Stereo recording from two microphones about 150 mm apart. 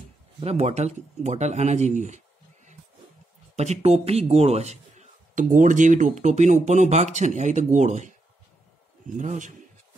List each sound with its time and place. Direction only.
0.4 s a man's voice: 45° right (ahead or behind)
9.1 s a man's voice: 55° right (ahead or behind)